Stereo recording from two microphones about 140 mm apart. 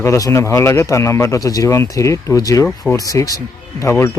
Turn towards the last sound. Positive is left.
turn(degrees=20)  # may be behind; listen again after turning